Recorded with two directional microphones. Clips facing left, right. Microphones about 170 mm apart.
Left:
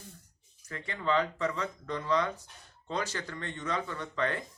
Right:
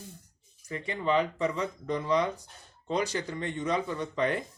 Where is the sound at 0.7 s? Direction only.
15° right (ahead or behind).